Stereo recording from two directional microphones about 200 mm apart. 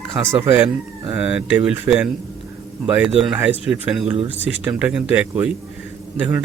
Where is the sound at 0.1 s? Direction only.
20° right (ahead or behind).